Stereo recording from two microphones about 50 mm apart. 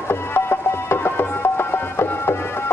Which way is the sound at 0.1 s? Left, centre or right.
Left.